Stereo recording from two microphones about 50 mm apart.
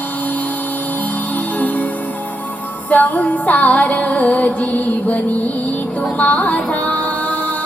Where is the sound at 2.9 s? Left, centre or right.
Left.